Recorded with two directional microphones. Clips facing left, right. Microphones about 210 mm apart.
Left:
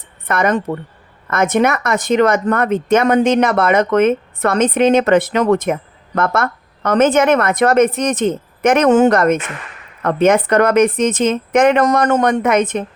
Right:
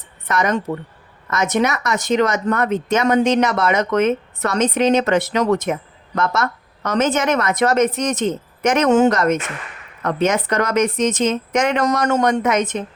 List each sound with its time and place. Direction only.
0.3 s a woman's voice: 55° left (ahead or behind)